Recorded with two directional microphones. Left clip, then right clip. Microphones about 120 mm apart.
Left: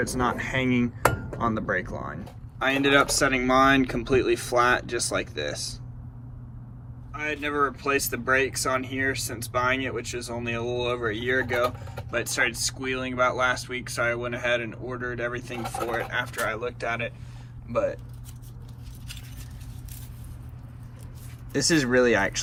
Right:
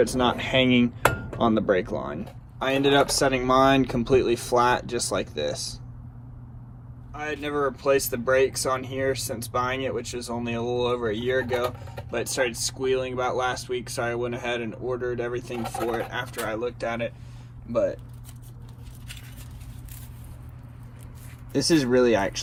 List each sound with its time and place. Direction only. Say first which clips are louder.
0.0 s speech: right 4 dB; 40° right (ahead or behind)
7.2 s speech: left 1 dB; 30° right (ahead or behind)
12.1 s speech: left 1 dB; 30° right (ahead or behind)
17.7 s speech: right 2 dB; 30° right (ahead or behind)
21.5 s speech: right 1 dB; 20° right (ahead or behind)